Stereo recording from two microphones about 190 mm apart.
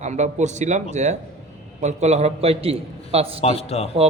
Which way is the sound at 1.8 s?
35° right (ahead or behind).